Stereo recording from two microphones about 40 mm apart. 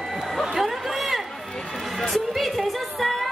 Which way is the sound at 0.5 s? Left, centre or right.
Centre.